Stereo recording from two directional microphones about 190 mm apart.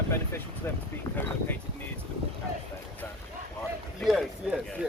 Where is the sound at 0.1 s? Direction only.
10° left (ahead or behind).